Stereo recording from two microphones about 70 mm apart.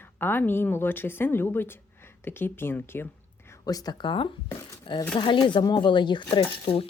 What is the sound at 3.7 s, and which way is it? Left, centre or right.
Speech, left.